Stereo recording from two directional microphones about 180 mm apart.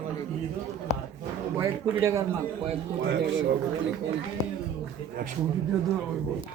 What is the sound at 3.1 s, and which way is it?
Speech, 60° right (ahead or behind).